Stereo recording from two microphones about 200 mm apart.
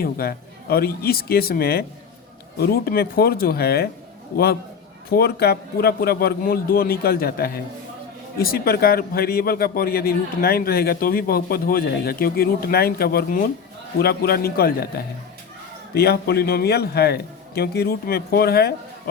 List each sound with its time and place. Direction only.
0.0 s a man's voice: 50° left (ahead or behind)
5.1 s a man's voice: 50° left (ahead or behind)